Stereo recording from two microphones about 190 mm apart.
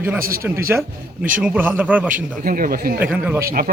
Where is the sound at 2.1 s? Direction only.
45° right (ahead or behind).